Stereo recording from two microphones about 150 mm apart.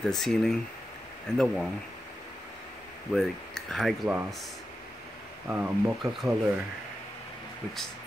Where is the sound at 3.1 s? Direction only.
Centre (ahead or behind).